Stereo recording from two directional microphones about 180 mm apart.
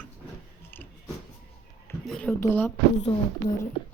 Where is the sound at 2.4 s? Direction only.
10° left (ahead or behind).